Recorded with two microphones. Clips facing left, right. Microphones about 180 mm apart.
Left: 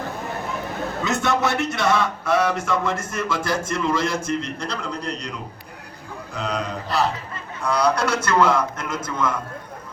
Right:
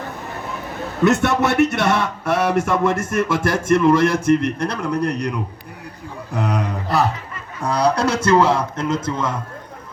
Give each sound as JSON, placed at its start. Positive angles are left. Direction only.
{"t": 1.0, "sound": "speech", "side_deg": -65}
{"t": 7.6, "sound": "a man's voice", "side_deg": -40}
{"t": 7.9, "sound": "a man's voice", "side_deg": -30}